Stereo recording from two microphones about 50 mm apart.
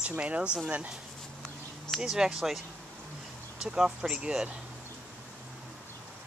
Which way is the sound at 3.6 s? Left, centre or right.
Centre.